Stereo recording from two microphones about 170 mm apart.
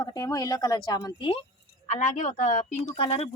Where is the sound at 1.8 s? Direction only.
40° left (ahead or behind).